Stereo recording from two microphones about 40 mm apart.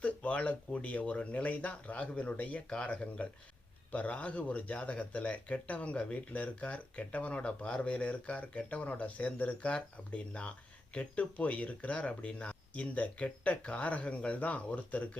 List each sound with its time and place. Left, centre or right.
0.0 s speech: left
3.9 s speech: left